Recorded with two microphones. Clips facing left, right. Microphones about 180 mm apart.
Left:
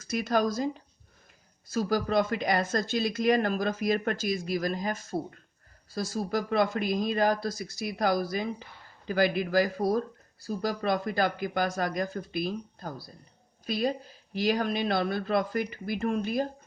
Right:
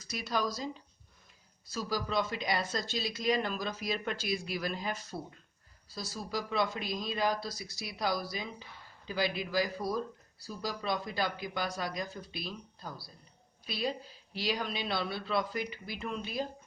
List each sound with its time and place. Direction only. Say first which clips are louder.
0.0 s speech: left 7 dB; 50° left (ahead or behind)